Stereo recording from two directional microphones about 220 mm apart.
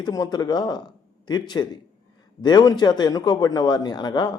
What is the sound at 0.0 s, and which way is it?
Speech, 15° left (ahead or behind).